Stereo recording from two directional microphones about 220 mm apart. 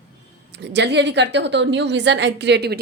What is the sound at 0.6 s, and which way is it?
A woman's voice, 50° right (ahead or behind).